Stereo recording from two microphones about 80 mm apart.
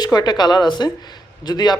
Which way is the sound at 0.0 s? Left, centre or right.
Left.